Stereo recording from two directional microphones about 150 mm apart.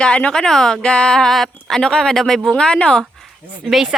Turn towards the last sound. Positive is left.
turn(degrees=-5)  # may be behind; listen again after turning